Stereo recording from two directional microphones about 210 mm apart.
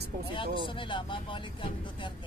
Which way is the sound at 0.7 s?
25° left (ahead or behind).